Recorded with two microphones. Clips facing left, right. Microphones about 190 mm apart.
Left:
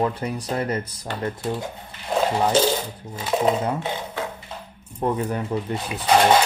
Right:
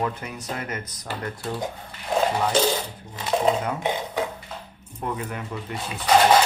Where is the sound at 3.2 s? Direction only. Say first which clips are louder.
Left 1 dB; centre (ahead or behind).